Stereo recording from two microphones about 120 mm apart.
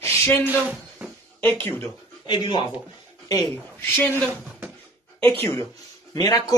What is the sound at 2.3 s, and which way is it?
Speech, 40° left (ahead or behind).